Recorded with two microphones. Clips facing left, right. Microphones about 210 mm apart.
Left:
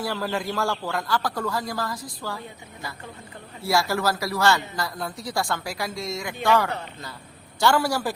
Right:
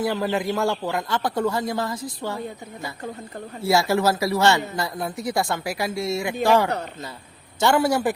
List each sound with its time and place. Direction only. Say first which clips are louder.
0.0 s speech: right 4 dB; 20° right (ahead or behind)
3.6 s speech: right 4 dB; 25° right (ahead or behind)